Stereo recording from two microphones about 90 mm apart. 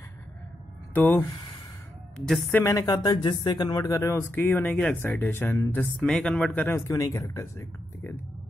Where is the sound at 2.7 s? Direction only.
45° left (ahead or behind).